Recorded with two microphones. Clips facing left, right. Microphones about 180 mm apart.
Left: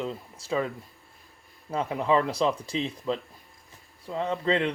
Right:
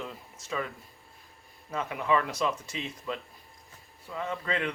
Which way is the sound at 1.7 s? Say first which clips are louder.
Left 4 dB; 30° left (ahead or behind).